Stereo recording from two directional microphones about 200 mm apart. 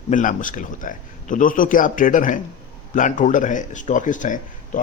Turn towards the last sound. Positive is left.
turn(degrees=40)  # may be behind; listen again after turning